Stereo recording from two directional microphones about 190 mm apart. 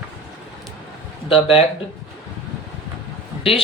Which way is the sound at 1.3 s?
30° left (ahead or behind).